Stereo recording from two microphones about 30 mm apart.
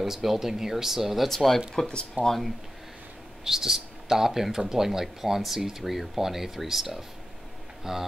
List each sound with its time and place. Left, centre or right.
0.0 s speech: centre
1.3 s speech: centre
2.2 s speech: right
3.4 s speech: centre